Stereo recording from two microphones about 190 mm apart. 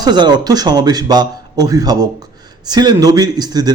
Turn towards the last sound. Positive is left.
turn(degrees=-20)  # may be behind; listen again after turning